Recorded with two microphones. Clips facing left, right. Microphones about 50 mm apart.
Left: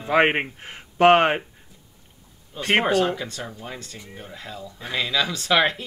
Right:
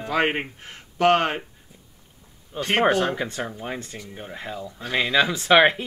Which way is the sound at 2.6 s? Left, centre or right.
Left.